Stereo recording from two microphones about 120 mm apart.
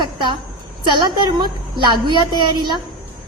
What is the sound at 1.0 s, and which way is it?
A woman's voice, 35° right (ahead or behind).